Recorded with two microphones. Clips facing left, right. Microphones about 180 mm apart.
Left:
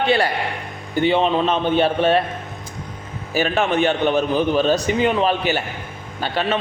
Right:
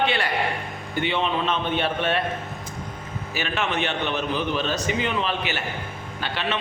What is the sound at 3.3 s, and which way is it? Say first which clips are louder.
A man's voice: left 8 dB; 45° left (ahead or behind).